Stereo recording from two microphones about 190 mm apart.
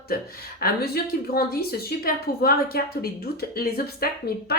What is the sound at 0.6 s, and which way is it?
A woman's voice, 55° left (ahead or behind).